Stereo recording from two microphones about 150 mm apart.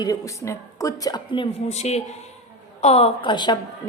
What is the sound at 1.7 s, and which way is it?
A man's voice, 45° left (ahead or behind).